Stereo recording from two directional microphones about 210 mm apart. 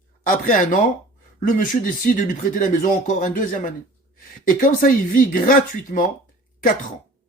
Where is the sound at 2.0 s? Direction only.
40° left (ahead or behind).